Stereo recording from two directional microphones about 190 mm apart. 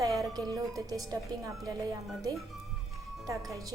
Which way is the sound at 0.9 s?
20° right (ahead or behind).